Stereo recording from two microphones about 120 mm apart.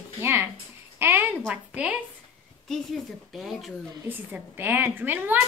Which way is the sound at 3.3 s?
Centre (ahead or behind).